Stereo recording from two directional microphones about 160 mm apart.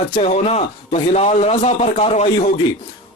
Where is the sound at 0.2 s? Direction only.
45° left (ahead or behind).